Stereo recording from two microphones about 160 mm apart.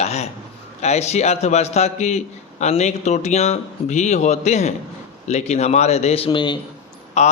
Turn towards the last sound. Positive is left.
turn(degrees=45)  # may be behind; listen again after turning